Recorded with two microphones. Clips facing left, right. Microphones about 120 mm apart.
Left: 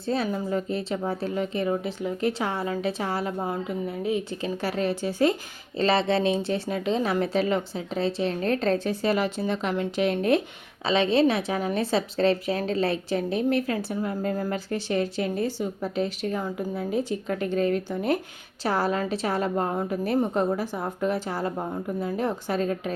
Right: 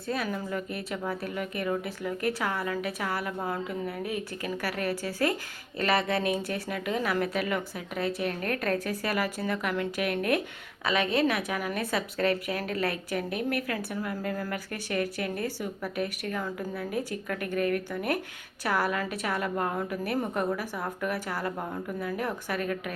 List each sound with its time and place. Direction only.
0.1 s a woman's voice: 25° left (ahead or behind)